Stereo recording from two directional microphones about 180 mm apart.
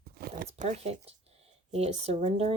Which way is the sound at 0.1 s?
55° right (ahead or behind).